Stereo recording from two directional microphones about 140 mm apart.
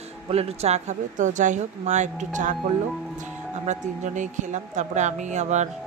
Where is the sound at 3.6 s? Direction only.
55° right (ahead or behind).